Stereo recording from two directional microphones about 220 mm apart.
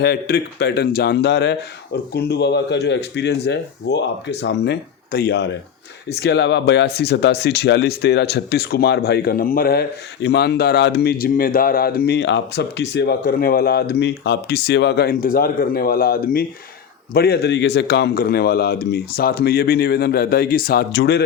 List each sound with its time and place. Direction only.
0.0 s speech: 45° left (ahead or behind)